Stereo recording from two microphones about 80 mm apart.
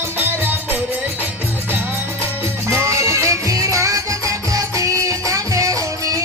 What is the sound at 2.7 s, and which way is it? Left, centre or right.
Music, right.